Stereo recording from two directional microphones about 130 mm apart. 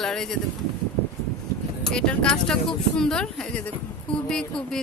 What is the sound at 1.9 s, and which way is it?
Speech, 10° left (ahead or behind).